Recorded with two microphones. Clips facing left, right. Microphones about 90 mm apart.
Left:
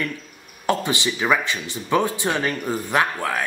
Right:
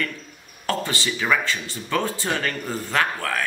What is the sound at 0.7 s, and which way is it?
Speech, 20° left (ahead or behind).